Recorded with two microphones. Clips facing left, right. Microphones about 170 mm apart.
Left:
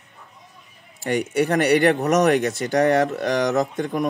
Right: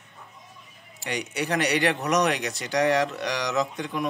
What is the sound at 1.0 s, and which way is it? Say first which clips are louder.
Speech: left 9 dB; 50° left (ahead or behind).